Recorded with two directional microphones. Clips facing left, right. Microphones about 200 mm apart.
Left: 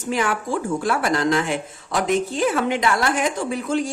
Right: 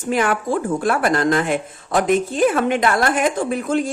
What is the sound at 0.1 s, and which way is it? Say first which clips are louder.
A woman's voice: right 4 dB; 55° right (ahead or behind).